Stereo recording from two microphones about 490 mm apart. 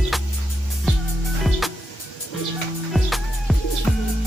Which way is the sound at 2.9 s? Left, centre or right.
Centre.